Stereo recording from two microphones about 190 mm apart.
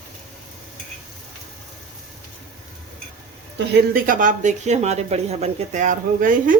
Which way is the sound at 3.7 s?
50° right (ahead or behind).